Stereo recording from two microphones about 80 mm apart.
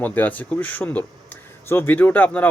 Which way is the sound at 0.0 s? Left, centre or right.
Left.